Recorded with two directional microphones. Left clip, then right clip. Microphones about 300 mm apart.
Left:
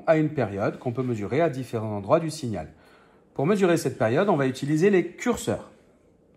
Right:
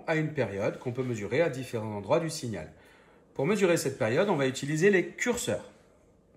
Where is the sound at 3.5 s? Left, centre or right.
Centre.